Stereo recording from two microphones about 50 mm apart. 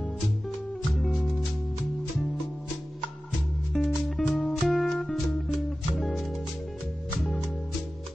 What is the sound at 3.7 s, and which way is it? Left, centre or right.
Music, centre.